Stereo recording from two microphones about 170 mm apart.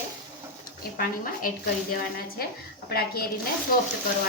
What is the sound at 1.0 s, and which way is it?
A woman's voice, 55° left (ahead or behind).